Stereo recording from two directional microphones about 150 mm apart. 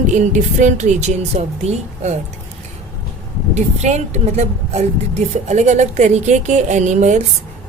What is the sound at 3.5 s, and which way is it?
A woman's voice, 50° right (ahead or behind).